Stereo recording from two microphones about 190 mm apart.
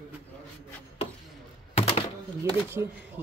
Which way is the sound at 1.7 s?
30° left (ahead or behind).